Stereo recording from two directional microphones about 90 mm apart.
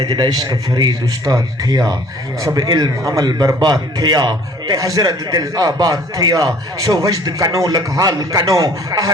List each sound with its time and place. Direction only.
0.0 s a man's voice: 50° right (ahead or behind)
4.7 s a man's voice: 40° right (ahead or behind)